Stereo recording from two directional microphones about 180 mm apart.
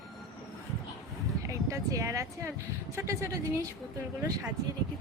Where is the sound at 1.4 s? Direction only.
15° right (ahead or behind).